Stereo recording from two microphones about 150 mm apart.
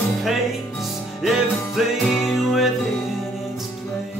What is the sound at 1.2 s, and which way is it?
Music, centre (ahead or behind).